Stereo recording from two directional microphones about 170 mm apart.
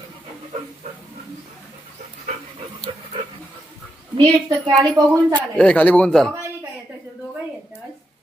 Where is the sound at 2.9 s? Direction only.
30° right (ahead or behind).